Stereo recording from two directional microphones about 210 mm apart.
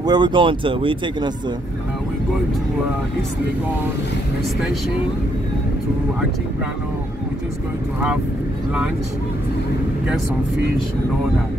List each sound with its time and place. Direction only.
0.0 s speech: 20° right (ahead or behind)